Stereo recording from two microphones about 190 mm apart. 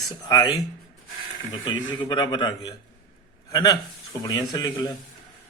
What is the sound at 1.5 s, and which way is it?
Speech, 25° left (ahead or behind).